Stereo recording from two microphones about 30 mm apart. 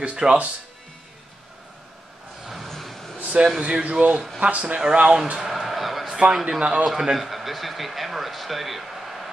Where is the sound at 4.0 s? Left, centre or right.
Right.